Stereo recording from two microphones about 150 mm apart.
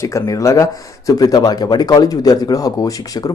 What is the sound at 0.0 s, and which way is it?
Speech, 20° left (ahead or behind).